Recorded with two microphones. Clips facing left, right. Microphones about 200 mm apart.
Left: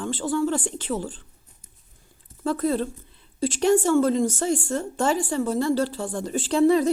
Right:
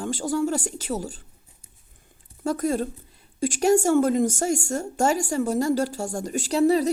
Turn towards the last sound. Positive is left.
turn(degrees=-35)  # may be behind; listen again after turning